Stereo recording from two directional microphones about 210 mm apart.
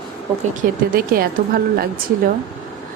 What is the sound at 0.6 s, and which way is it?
A woman's voice, 40° right (ahead or behind).